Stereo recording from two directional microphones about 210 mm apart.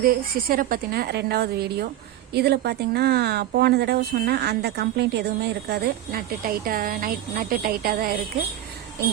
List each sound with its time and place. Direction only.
0.0 s speech: 45° right (ahead or behind)